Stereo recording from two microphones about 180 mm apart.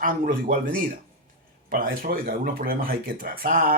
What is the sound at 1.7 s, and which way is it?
Speech, 50° right (ahead or behind).